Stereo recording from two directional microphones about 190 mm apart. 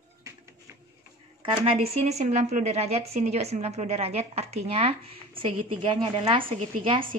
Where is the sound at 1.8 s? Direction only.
35° right (ahead or behind).